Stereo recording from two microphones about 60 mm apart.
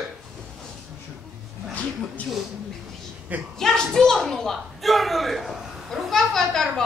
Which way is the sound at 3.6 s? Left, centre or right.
Centre.